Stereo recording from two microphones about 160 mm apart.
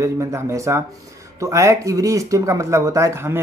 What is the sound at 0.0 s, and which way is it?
Speech, 20° right (ahead or behind).